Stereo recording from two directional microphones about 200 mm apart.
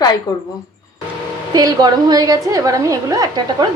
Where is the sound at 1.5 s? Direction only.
20° right (ahead or behind).